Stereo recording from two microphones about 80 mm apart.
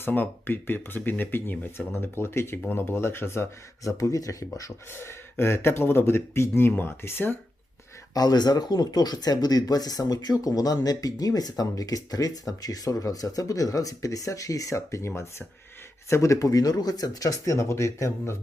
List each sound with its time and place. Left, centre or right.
0.0 s speech: left
4.9 s speech: left
8.1 s speech: left